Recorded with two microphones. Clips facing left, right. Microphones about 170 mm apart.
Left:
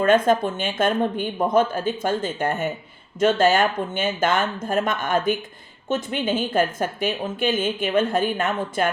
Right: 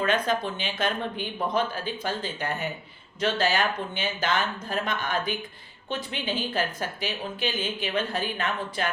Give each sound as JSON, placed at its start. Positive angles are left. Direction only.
{"t": 0.0, "sound": "a woman's voice", "side_deg": 50}